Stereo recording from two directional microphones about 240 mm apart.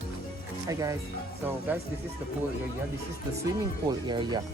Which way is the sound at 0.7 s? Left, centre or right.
Centre.